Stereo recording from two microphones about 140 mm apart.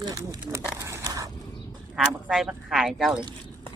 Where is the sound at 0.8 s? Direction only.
20° right (ahead or behind).